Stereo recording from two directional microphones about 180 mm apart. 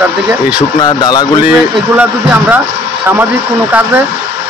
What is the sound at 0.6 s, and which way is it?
Speech, 25° left (ahead or behind).